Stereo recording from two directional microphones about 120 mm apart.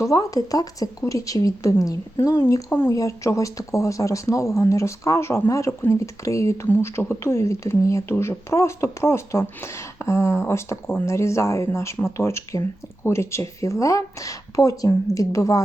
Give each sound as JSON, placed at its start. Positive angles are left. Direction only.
{"t": 0.0, "sound": "speech", "side_deg": 30}